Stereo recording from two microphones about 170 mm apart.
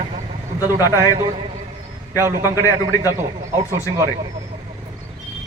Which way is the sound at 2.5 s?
20° left (ahead or behind).